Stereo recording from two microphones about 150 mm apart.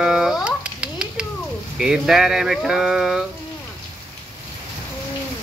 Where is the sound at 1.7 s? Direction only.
5° right (ahead or behind).